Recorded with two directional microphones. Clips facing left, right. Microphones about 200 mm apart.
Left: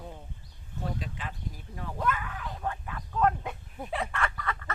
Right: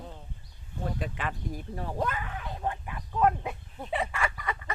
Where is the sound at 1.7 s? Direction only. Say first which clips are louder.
Left 1 dB; 35° right (ahead or behind); by 3.3 s 15° right (ahead or behind).